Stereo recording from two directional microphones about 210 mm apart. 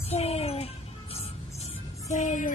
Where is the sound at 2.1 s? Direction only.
35° left (ahead or behind).